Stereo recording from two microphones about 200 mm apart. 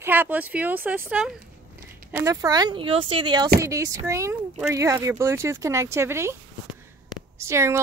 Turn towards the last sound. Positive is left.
turn(degrees=-15)  # may be behind; listen again after turning